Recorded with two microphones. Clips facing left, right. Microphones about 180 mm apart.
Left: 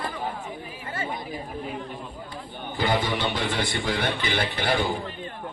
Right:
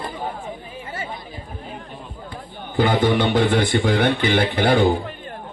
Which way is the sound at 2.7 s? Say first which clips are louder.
Right 8 dB; 55° right (ahead or behind).